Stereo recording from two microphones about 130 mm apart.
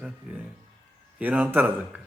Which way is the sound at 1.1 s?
10° right (ahead or behind).